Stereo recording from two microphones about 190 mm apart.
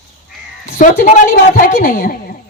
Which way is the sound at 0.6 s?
55° left (ahead or behind).